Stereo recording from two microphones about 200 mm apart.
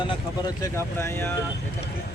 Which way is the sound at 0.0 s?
20° left (ahead or behind).